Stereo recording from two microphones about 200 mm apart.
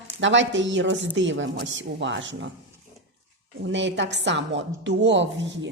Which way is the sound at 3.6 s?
65° right (ahead or behind).